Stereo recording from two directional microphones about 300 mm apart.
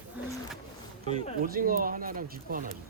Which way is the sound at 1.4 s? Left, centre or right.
Right.